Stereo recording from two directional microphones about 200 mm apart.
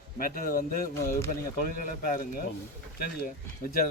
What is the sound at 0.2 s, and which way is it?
Speech, 45° left (ahead or behind).